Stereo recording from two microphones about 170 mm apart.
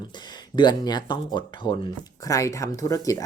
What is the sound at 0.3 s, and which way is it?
Speech, 25° left (ahead or behind).